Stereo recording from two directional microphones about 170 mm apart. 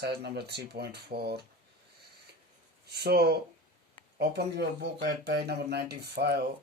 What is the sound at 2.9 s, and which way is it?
Speech, 70° right (ahead or behind).